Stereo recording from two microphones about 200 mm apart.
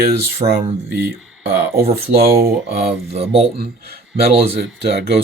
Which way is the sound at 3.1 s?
30° right (ahead or behind).